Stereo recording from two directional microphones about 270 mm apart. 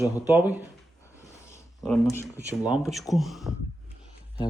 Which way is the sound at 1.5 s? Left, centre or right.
Centre.